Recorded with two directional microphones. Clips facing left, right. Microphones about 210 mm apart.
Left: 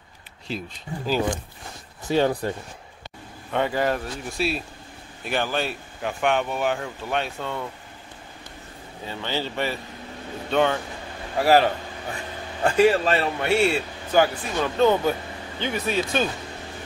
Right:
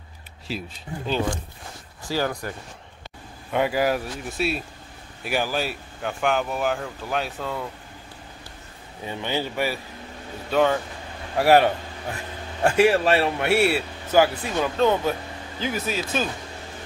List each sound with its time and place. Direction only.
0.5 s speech: centre (ahead or behind)
2.0 s speech: 25° left (ahead or behind)
3.5 s speech: 5° right (ahead or behind)
9.0 s a man's voice: 15° right (ahead or behind)